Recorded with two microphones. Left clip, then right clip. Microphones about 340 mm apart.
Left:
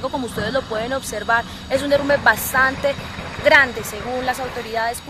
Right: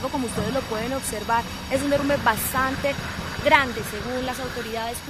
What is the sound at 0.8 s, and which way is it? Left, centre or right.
Speech, left.